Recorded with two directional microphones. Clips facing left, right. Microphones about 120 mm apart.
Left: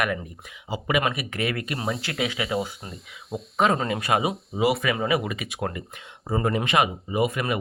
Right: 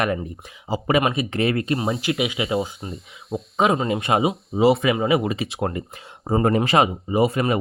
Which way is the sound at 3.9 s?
25° right (ahead or behind).